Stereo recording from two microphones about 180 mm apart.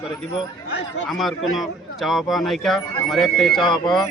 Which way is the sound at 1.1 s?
Centre (ahead or behind).